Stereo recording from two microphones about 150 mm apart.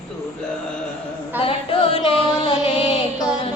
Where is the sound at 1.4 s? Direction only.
40° left (ahead or behind).